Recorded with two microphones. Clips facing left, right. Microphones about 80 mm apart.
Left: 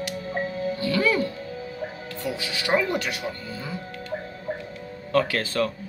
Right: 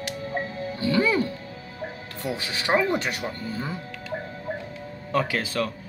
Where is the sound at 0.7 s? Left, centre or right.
Right.